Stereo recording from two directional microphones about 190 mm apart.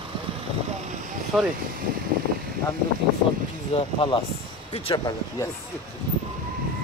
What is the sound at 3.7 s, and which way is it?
Speech, 30° left (ahead or behind).